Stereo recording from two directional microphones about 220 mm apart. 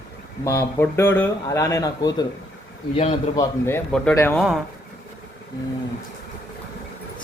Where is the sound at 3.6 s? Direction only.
10° left (ahead or behind).